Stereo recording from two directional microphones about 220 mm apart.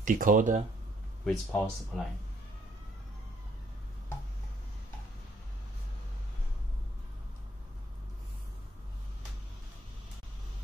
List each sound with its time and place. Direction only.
0.0 s speech: 35° right (ahead or behind)
1.2 s speech: centre (ahead or behind)